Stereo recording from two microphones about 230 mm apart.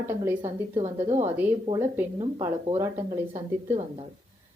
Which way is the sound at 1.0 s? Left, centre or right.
Right.